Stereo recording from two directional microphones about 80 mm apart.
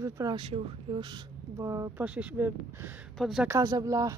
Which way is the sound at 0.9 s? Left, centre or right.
Right.